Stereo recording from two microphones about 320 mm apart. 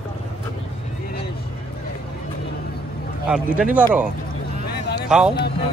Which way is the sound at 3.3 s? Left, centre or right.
Centre.